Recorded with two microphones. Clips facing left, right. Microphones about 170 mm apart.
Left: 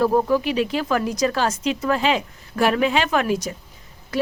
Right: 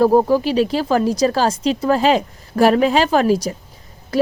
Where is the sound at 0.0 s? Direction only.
35° right (ahead or behind).